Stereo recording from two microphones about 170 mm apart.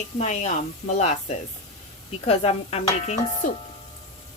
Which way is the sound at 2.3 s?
35° left (ahead or behind).